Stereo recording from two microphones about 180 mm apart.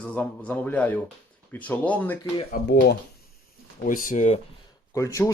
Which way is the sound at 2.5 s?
60° left (ahead or behind).